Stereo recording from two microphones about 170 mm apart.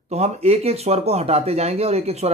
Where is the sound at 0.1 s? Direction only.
40° right (ahead or behind).